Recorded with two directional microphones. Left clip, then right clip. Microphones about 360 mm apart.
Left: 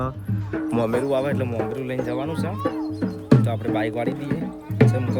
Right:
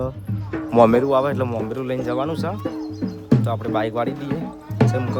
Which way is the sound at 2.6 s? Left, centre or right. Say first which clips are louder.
Left 2 dB; centre.